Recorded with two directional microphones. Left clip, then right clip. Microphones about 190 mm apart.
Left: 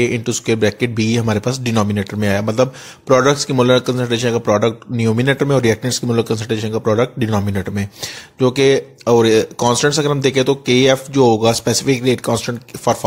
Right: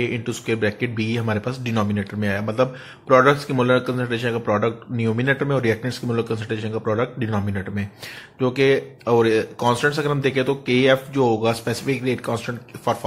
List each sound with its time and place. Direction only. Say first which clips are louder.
0.0 s speech: left 7 dB; 45° left (ahead or behind)